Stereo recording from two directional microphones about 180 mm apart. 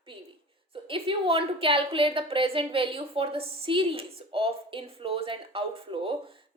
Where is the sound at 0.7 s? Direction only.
30° right (ahead or behind).